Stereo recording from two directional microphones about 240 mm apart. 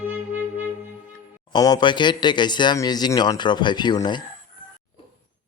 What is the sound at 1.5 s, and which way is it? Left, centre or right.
Speech, centre.